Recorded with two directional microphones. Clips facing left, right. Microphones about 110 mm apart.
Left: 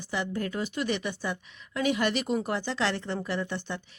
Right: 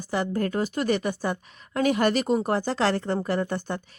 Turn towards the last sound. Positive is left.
turn(degrees=-45)  # may be behind; listen again after turning